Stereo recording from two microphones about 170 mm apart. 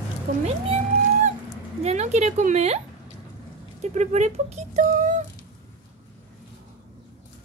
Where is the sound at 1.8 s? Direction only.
40° right (ahead or behind).